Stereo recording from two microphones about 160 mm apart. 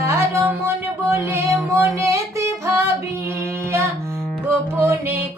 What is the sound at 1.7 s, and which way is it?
Singing, 15° right (ahead or behind).